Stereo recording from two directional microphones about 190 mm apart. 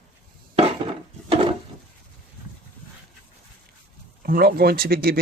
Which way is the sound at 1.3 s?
30° right (ahead or behind).